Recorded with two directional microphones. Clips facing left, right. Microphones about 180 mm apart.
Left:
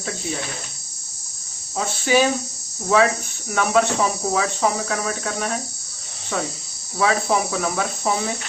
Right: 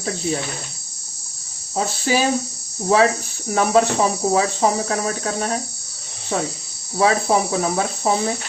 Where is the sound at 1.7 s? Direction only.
35° right (ahead or behind).